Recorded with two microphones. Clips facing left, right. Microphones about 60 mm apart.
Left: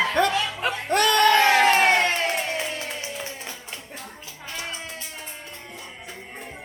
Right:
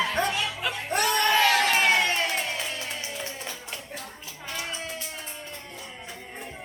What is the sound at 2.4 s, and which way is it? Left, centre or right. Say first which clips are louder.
Music: left 3 dB; left.